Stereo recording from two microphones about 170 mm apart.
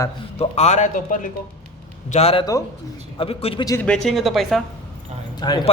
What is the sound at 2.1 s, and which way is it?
A man's voice, 35° left (ahead or behind).